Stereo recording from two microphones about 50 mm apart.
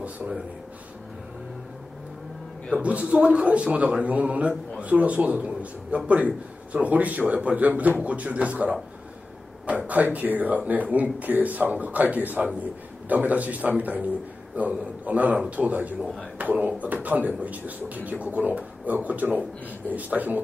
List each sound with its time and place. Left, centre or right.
2.7 s a man's voice: right